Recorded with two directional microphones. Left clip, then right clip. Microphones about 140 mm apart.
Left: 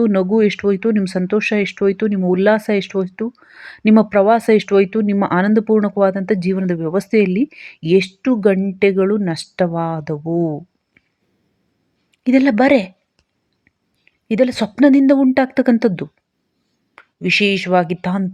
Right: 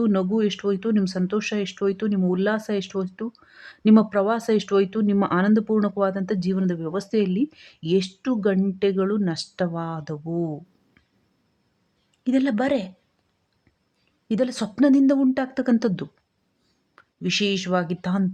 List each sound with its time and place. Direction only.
0.0 s speech: 25° left (ahead or behind)
12.2 s speech: 30° left (ahead or behind)
14.3 s speech: 20° left (ahead or behind)
16.9 s speech: 25° left (ahead or behind)